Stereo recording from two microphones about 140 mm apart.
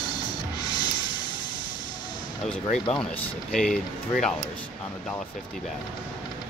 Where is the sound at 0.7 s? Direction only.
30° left (ahead or behind).